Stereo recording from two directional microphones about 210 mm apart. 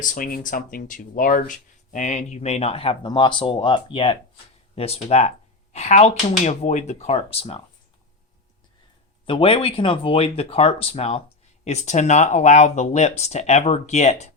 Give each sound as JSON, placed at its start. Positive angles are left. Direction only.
{"t": 0.0, "sound": "speech", "side_deg": 40}
{"t": 9.2, "sound": "speech", "side_deg": 25}